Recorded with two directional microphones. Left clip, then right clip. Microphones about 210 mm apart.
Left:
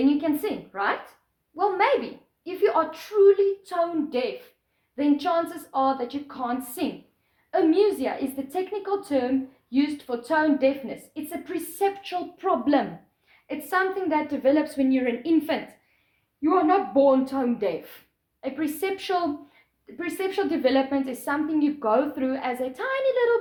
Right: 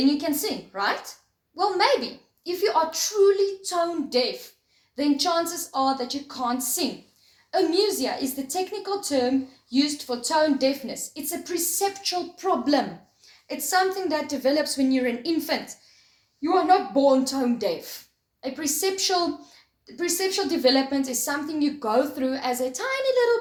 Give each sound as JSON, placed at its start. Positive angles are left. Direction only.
{"t": 0.7, "sound": "a woman's voice", "side_deg": 35}
{"t": 18.8, "sound": "a woman's voice", "side_deg": 35}